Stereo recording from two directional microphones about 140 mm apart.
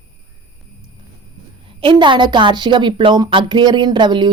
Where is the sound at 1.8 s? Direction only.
35° right (ahead or behind).